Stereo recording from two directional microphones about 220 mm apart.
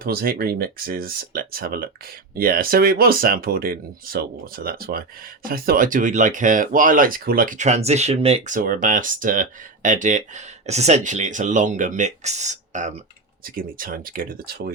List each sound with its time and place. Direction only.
0.0 s speech: 45° right (ahead or behind)